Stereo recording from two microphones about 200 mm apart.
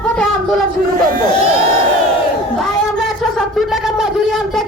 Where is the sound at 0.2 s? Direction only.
5° left (ahead or behind).